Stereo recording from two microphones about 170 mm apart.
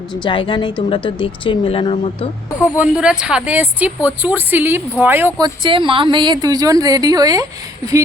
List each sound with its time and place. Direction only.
0.1 s speech: 30° left (ahead or behind)
2.7 s a woman's voice: 10° right (ahead or behind)
5.4 s a woman's voice: 30° right (ahead or behind)